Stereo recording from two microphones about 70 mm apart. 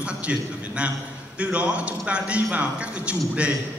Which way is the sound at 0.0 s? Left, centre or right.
Centre.